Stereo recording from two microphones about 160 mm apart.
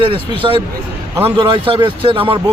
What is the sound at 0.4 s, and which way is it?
Speech, 30° right (ahead or behind).